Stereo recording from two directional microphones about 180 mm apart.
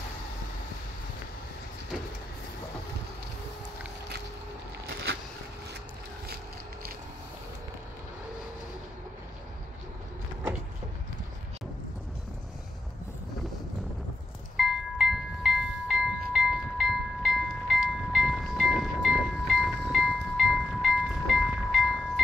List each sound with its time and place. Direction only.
6.2 s vehicle: 60° right (ahead or behind)
14.6 s music: centre (ahead or behind)